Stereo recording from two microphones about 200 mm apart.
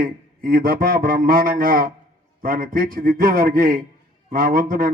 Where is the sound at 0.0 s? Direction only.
45° right (ahead or behind).